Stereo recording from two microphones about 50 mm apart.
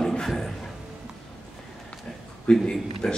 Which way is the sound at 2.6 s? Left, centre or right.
Centre.